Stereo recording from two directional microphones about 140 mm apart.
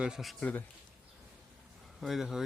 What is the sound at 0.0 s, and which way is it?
Speech, 5° right (ahead or behind).